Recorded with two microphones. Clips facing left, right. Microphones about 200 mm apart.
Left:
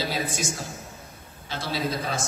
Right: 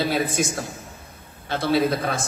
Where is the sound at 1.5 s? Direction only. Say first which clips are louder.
Right 8 dB; 60° right (ahead or behind).